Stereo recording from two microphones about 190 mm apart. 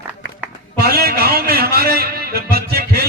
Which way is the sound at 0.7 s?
55° right (ahead or behind).